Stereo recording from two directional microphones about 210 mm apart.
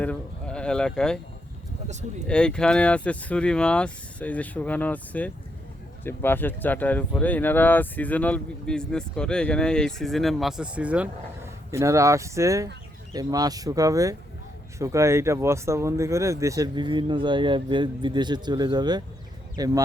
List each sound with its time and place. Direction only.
0.0 s sheep: 5° left (ahead or behind)
1.9 s speech: 35° right (ahead or behind)
2.2 s speech: 5° left (ahead or behind); by 19.8 s 15° right (ahead or behind)